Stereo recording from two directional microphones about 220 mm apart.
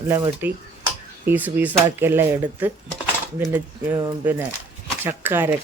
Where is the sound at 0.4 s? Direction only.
10° right (ahead or behind).